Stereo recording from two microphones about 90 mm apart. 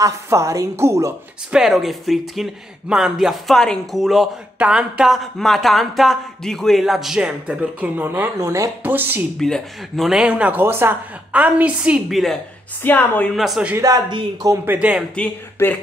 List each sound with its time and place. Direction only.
0.0 s a woman's voice: 35° right (ahead or behind)
1.5 s speech: 5° right (ahead or behind); by 8.3 s 20° right (ahead or behind)
8.4 s a woman's voice: 35° right (ahead or behind)
8.8 s speech: 20° right (ahead or behind)
9.4 s speech: 5° left (ahead or behind); by 12.0 s 15° right (ahead or behind)
12.1 s speech: centre (ahead or behind)
12.8 s speech: 20° left (ahead or behind)
13.3 s speech: centre (ahead or behind)
13.7 s a woman's voice: 40° right (ahead or behind)
14.6 s speech: 20° right (ahead or behind)
15.1 s speech: 15° left (ahead or behind)